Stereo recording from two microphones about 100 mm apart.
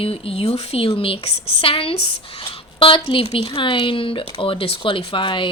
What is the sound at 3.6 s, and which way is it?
Speech, 55° left (ahead or behind).